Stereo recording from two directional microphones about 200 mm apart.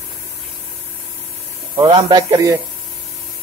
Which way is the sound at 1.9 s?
20° right (ahead or behind).